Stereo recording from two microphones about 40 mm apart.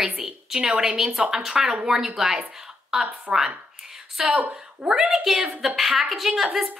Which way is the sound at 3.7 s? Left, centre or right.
Centre.